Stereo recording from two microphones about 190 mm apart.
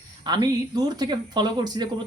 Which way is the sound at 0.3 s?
20° right (ahead or behind).